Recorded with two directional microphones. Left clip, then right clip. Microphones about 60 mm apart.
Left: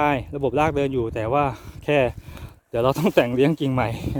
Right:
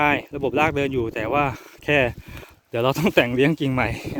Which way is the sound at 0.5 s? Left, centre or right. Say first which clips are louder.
Right 1 dB; centre.